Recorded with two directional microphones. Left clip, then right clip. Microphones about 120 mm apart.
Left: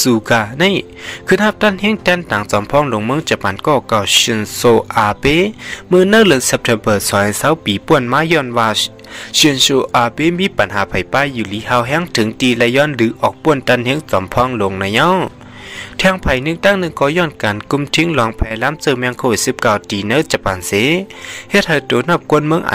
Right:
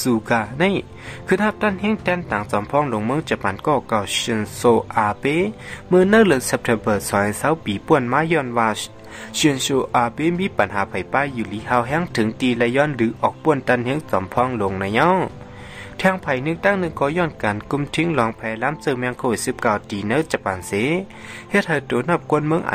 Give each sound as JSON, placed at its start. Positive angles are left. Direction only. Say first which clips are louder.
{"t": 0.0, "sound": "speech", "louder": "left 7 dB", "side_deg": 35}
{"t": 9.4, "sound": "speech", "louder": "left 8 dB", "side_deg": 25}